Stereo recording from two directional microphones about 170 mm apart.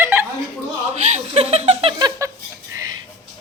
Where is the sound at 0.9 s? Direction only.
40° right (ahead or behind).